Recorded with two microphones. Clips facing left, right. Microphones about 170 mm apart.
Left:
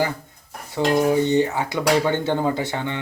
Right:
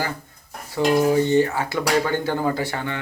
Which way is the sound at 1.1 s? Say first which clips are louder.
Right 1 dB; 20° left (ahead or behind).